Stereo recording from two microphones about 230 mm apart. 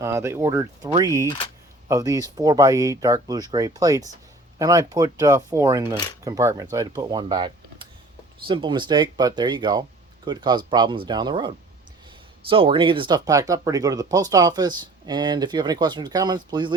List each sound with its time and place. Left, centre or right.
0.0 s speech: centre